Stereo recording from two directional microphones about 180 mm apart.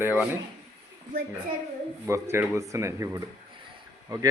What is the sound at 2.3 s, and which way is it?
Speech, 15° right (ahead or behind).